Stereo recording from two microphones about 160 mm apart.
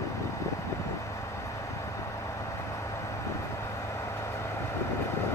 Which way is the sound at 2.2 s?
20° left (ahead or behind).